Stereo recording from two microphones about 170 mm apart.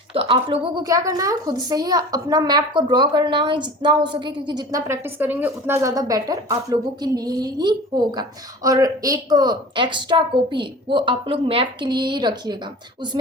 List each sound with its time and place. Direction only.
0.1 s a woman's voice: 35° right (ahead or behind)
0.9 s a woman's voice: 20° right (ahead or behind)